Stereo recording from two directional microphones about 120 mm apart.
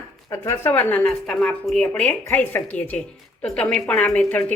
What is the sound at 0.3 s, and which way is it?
Speech, 25° left (ahead or behind).